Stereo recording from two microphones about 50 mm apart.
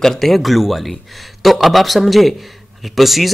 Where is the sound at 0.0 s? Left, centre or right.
Centre.